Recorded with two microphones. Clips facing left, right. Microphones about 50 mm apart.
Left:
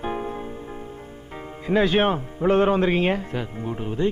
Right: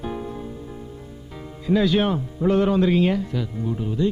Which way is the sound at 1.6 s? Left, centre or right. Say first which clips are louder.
Even; left.